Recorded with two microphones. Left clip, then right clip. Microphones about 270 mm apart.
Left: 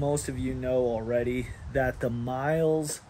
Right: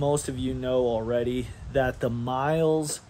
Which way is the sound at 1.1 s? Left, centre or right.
Right.